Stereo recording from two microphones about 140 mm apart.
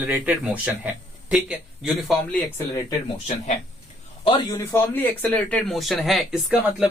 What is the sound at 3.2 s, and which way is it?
Speech, 55° left (ahead or behind).